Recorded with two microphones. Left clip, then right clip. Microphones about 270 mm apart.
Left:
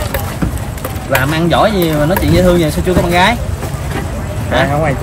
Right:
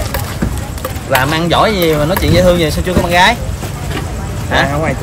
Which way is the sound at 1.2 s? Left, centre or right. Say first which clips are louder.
Even; right.